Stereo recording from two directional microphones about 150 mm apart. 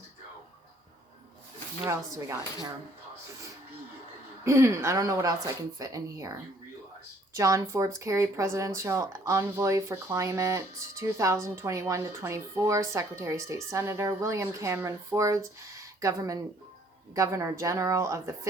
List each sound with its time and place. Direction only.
1.9 s speech: 20° right (ahead or behind)
4.4 s speech: 20° right (ahead or behind)